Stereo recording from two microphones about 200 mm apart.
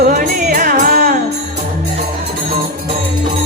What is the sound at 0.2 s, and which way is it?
Music, 45° right (ahead or behind).